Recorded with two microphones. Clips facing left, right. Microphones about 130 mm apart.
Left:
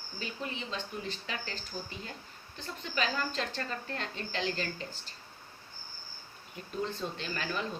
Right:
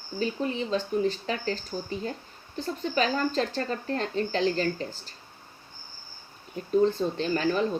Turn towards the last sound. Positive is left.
turn(degrees=-40)  # may be behind; listen again after turning